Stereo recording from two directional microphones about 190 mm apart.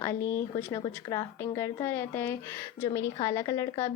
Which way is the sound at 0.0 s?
15° left (ahead or behind).